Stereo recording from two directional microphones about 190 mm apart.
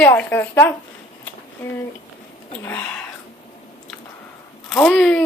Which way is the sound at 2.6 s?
10° left (ahead or behind).